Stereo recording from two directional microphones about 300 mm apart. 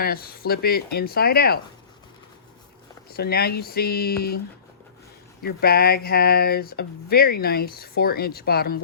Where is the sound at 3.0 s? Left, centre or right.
Left.